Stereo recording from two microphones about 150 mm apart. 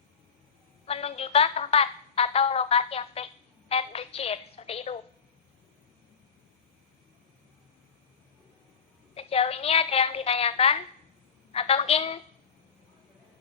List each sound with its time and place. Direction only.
0.9 s a woman's voice: 45° left (ahead or behind)
9.1 s a woman's voice: 40° left (ahead or behind)